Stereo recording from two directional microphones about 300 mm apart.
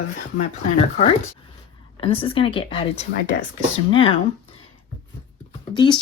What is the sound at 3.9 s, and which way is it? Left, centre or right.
Speech, centre.